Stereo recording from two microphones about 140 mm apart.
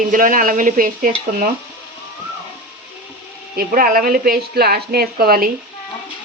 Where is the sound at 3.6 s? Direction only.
90° right.